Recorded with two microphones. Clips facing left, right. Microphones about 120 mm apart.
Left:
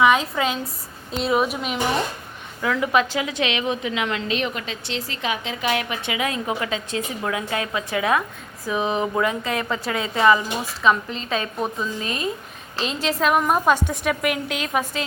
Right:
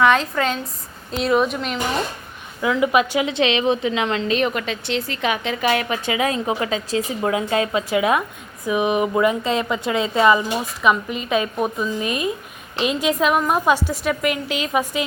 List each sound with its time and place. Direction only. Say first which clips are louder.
0.0 s a woman's voice: right 1 dB; 5° left (ahead or behind)
2.8 s a woman's voice: right 3 dB; 10° right (ahead or behind)
3.2 s a woman's voice: right 5 dB; 30° right (ahead or behind)
4.4 s a woman's voice: right 5 dB; 55° right (ahead or behind)
5.7 s a woman's voice: right 4 dB; 35° right (ahead or behind); by 13.1 s 15° right (ahead or behind)
13.1 s a woman's voice: right 1 dB; centre (ahead or behind)